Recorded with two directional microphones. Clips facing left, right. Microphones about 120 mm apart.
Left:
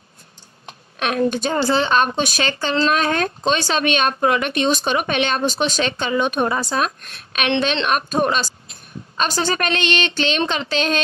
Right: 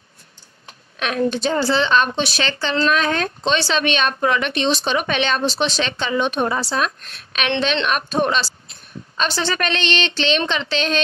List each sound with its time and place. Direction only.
1.0 s speech: 45° left (ahead or behind)